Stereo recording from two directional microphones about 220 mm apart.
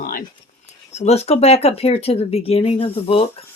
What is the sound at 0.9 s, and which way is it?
Speech, 30° left (ahead or behind).